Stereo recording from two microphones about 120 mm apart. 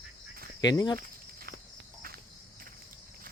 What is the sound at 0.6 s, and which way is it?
Speech, 35° left (ahead or behind).